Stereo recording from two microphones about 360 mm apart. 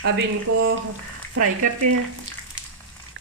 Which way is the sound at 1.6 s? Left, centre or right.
Right.